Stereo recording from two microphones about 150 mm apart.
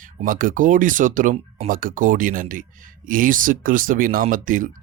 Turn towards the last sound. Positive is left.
turn(degrees=-65)  # may be behind; listen again after turning